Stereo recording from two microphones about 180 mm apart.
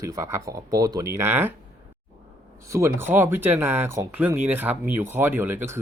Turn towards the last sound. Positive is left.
turn(degrees=-10)  # may be behind; listen again after turning